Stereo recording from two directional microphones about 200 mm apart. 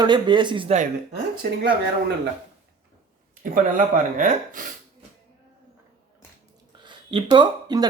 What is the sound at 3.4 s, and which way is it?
Speech, 40° right (ahead or behind).